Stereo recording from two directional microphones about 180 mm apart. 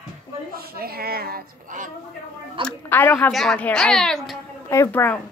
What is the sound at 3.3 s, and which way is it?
Music, centre (ahead or behind).